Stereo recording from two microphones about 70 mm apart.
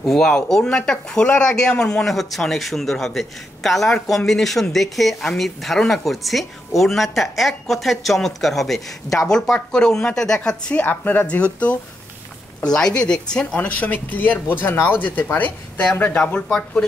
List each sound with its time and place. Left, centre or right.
0.0 s speech: centre
13.6 s speech: left